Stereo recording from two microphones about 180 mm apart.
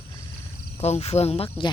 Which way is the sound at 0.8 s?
35° left (ahead or behind).